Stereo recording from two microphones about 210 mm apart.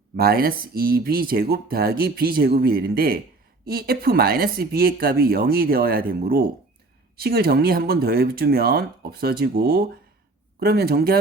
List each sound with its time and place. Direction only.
0.2 s speech: 45° right (ahead or behind)